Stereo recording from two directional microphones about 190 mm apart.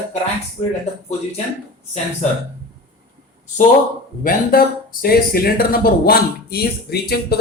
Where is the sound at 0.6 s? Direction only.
30° left (ahead or behind).